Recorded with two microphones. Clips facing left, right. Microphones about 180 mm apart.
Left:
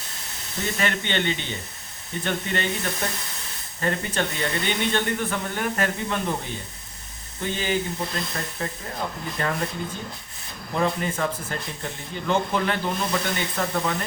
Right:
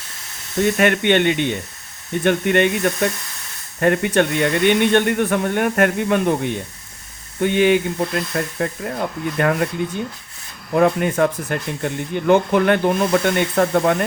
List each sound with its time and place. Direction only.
0.6 s speech: 60° right (ahead or behind)
10.8 s speech: 60° right (ahead or behind)